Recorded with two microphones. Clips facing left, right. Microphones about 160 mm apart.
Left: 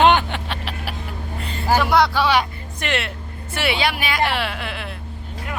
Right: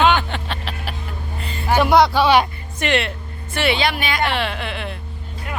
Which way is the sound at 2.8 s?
Centre (ahead or behind).